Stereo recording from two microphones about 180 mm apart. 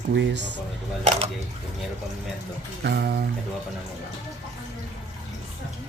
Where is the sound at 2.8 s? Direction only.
65° right (ahead or behind).